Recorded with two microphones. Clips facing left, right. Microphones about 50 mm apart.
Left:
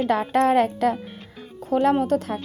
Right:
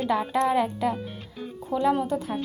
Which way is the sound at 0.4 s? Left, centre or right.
Left.